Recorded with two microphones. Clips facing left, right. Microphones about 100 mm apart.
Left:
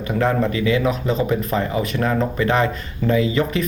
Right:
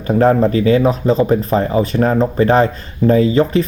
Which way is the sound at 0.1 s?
35° right (ahead or behind).